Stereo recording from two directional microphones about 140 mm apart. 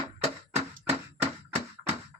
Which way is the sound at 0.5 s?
50° right (ahead or behind).